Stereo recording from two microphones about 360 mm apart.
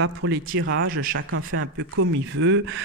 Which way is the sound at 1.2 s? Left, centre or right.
Right.